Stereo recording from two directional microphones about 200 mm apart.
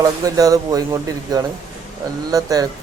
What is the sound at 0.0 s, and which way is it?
A man's voice, 15° right (ahead or behind).